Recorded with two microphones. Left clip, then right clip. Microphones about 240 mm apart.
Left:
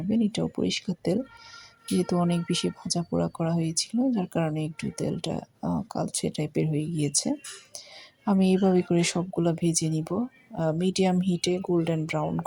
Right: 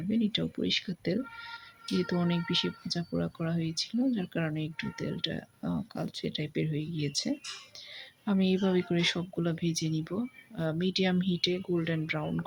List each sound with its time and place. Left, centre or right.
0.1 s speech: centre